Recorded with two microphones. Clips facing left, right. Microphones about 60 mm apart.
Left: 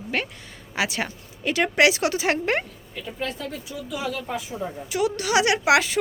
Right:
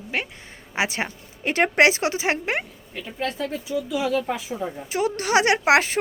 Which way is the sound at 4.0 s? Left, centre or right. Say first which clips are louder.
Right 3 dB; right.